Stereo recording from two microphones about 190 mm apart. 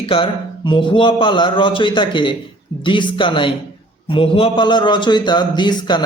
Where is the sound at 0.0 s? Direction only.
30° left (ahead or behind).